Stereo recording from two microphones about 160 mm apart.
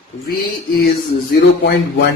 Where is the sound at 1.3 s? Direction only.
90° left.